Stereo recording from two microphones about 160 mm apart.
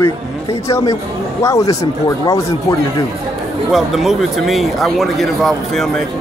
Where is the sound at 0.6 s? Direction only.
20° left (ahead or behind).